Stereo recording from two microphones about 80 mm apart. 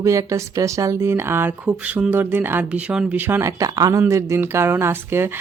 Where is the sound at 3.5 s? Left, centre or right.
Right.